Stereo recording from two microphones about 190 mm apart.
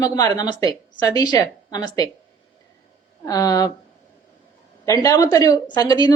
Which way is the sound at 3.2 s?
20° left (ahead or behind).